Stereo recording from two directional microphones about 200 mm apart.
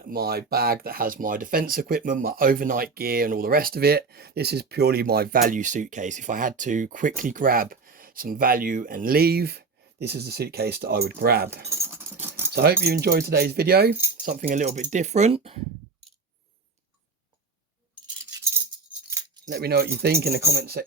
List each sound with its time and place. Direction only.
0.1 s speech: 50° right (ahead or behind)
11.7 s a sound: 15° right (ahead or behind)
12.8 s speech: 55° right (ahead or behind)
14.3 s speech: 40° right (ahead or behind)
19.5 s speech: 50° right (ahead or behind)